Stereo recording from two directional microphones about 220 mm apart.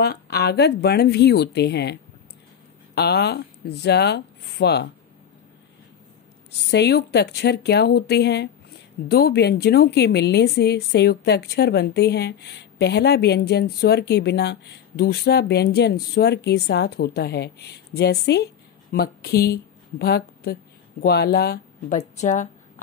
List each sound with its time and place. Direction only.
0.0 s a woman's voice: 45° left (ahead or behind)
6.7 s a woman's voice: 50° left (ahead or behind)
21.9 s a woman's voice: 35° left (ahead or behind)